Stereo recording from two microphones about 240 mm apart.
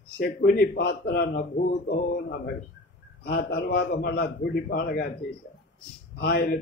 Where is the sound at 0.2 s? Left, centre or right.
Left.